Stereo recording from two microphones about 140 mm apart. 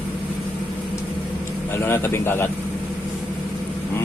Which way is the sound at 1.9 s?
15° left (ahead or behind).